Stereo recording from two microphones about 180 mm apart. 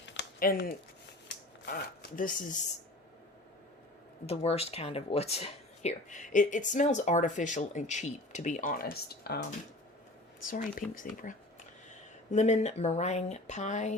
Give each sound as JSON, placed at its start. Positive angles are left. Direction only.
{"t": 0.3, "sound": "speech", "side_deg": 55}
{"t": 4.3, "sound": "speech", "side_deg": 35}
{"t": 10.4, "sound": "speech", "side_deg": 50}